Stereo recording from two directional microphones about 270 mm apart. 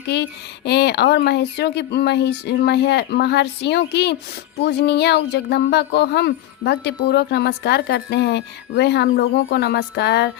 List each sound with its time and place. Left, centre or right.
0.1 s speech: left